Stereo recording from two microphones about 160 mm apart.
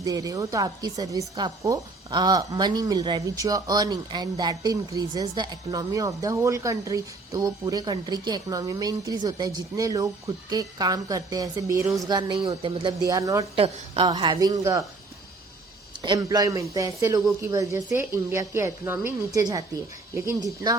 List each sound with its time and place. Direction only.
0.0 s a woman's voice: 20° right (ahead or behind)
13.1 s a woman's voice: 20° right (ahead or behind)
13.4 s a woman's voice: 35° right (ahead or behind); by 14.8 s 20° right (ahead or behind)
16.0 s a woman's voice: 25° right (ahead or behind)